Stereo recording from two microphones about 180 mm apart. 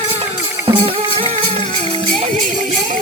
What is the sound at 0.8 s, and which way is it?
Music, 35° right (ahead or behind).